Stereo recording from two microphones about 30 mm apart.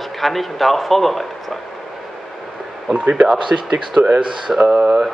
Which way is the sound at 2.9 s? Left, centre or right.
Right.